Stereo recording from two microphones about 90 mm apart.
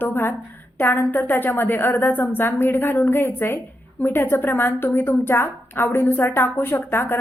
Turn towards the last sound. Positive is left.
turn(degrees=25)  # may be behind; listen again after turning